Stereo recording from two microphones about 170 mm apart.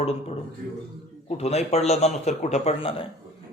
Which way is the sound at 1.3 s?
40° left (ahead or behind).